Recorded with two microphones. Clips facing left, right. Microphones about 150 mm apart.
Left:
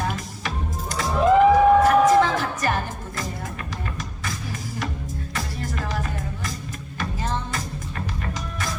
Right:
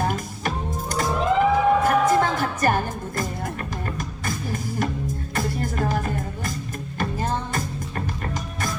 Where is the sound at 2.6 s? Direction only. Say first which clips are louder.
Right 5 dB; 50° right (ahead or behind).